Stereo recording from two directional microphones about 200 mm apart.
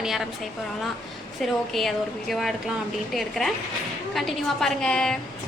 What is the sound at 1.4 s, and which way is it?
A woman's voice, centre (ahead or behind).